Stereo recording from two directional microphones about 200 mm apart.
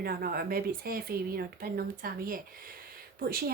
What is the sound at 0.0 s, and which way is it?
Speech, 50° right (ahead or behind).